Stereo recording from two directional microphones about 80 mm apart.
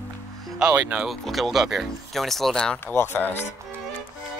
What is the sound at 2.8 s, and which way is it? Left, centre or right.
Speech, left.